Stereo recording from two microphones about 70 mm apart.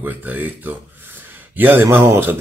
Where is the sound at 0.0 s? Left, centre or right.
Right.